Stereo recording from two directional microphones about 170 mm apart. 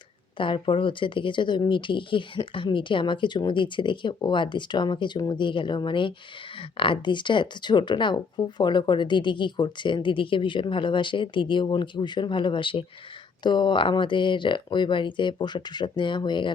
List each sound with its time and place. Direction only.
0.3 s speech: 30° left (ahead or behind)